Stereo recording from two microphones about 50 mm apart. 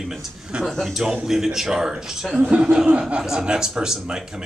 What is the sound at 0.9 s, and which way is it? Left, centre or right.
Speech, centre.